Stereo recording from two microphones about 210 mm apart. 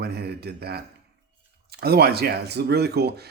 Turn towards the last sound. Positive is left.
turn(degrees=-50)  # may be behind; listen again after turning